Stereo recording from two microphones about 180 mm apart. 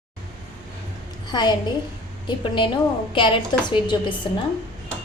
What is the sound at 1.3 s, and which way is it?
A woman's voice, 25° left (ahead or behind).